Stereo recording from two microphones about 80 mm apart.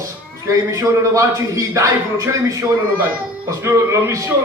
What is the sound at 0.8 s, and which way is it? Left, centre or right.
A man's voice, right.